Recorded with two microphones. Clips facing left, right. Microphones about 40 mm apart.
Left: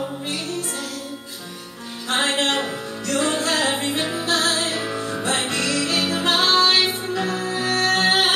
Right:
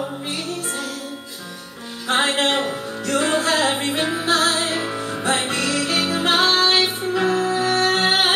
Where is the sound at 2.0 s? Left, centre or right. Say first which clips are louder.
Right 2 dB; centre.